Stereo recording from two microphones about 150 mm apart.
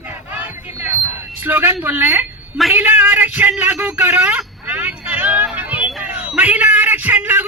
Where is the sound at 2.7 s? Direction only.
15° right (ahead or behind).